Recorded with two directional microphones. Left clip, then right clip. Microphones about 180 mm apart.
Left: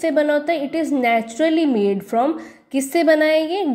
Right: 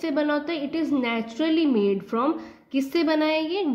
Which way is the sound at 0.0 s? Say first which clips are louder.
Left 7 dB; 25° left (ahead or behind).